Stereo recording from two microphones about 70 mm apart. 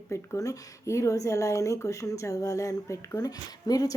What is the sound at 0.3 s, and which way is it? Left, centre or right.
A woman's voice, left.